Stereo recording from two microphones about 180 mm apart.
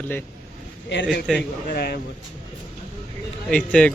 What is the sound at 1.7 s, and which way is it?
Speech, 60° left (ahead or behind).